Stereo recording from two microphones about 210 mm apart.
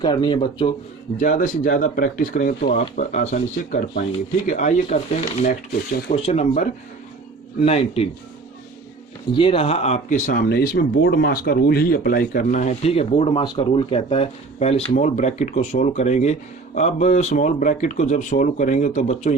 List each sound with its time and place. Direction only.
0.0 s speech: 20° left (ahead or behind)
1.2 s speech: 40° left (ahead or behind)
6.1 s speech: 30° left (ahead or behind)
9.3 s speech: 25° left (ahead or behind)